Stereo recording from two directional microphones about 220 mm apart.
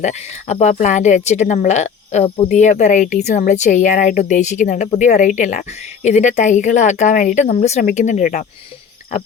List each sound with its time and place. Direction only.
0.0 s a woman's voice: 30° left (ahead or behind)